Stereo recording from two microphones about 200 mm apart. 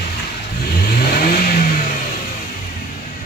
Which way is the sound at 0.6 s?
50° left (ahead or behind).